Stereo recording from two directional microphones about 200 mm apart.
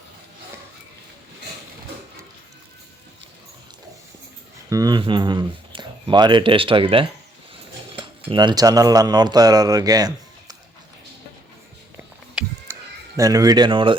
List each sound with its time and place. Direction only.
4.7 s speech: 20° right (ahead or behind)
8.3 s speech: 20° right (ahead or behind)
12.3 s music: 5° right (ahead or behind)
13.1 s speech: 15° right (ahead or behind)